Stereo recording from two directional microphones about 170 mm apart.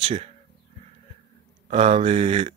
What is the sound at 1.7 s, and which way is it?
Speech, 40° right (ahead or behind).